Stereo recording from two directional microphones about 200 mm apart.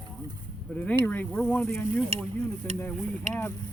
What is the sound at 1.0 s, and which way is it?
Speech, 10° left (ahead or behind).